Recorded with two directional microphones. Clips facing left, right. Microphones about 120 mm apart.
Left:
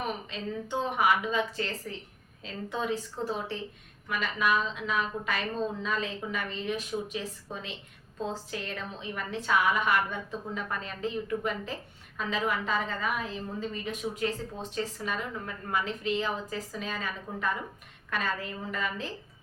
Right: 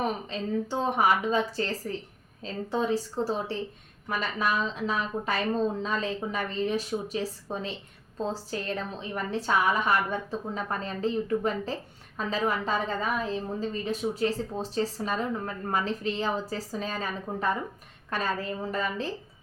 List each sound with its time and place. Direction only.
0.3 s a woman's voice: 35° right (ahead or behind)